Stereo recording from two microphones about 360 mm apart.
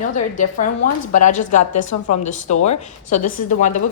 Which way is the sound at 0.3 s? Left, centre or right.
Left.